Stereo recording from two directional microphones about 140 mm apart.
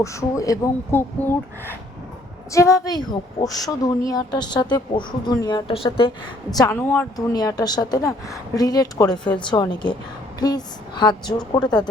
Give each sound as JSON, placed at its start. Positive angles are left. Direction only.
{"t": 0.0, "sound": "a woman's voice", "side_deg": 20}
{"t": 6.7, "sound": "a woman's voice", "side_deg": 15}
{"t": 7.3, "sound": "a woman's voice", "side_deg": 30}